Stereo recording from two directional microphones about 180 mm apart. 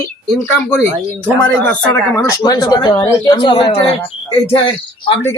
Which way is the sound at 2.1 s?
20° left (ahead or behind).